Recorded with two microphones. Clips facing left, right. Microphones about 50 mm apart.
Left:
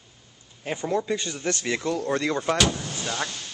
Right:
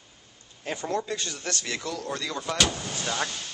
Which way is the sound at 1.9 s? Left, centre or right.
Left.